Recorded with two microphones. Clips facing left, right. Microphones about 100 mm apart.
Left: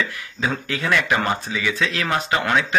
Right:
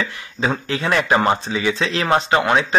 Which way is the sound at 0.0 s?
30° right (ahead or behind).